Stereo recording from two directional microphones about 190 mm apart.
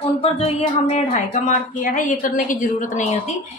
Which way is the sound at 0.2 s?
35° left (ahead or behind).